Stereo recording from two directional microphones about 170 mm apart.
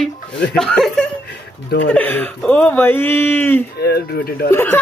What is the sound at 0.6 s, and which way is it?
Speech, 5° left (ahead or behind).